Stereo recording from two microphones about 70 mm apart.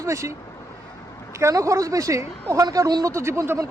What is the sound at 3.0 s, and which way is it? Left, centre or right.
Speech, right.